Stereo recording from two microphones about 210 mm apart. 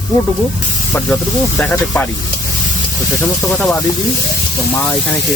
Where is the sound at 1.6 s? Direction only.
5° left (ahead or behind).